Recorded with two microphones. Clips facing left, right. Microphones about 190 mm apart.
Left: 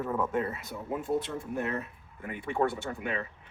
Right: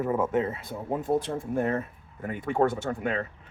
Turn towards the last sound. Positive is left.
turn(degrees=-50)  # may be behind; listen again after turning